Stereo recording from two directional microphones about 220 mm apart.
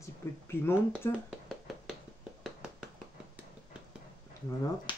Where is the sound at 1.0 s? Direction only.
15° left (ahead or behind).